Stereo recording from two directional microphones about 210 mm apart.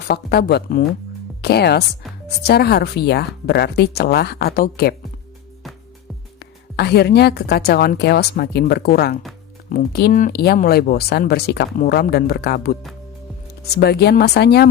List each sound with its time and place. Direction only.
0.1 s speech: 50° left (ahead or behind)
6.4 s speech: 50° left (ahead or behind)
13.7 s speech: 50° left (ahead or behind)